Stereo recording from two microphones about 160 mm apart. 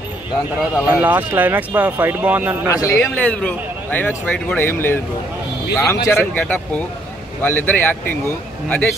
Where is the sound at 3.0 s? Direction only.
10° left (ahead or behind).